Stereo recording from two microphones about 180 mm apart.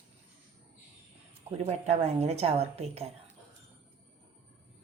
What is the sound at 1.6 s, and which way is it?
Speech, 35° right (ahead or behind).